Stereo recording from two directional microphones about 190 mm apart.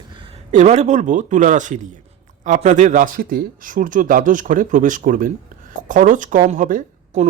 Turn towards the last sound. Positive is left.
turn(degrees=-40)  # may be behind; listen again after turning